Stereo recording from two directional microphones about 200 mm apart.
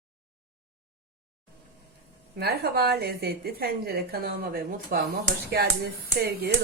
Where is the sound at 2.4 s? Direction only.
55° right (ahead or behind).